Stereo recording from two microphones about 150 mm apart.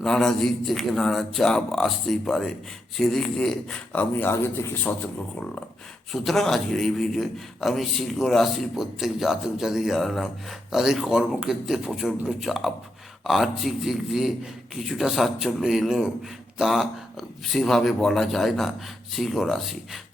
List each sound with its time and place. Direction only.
0.0 s a man's voice: 5° left (ahead or behind)
6.1 s a man's voice: centre (ahead or behind)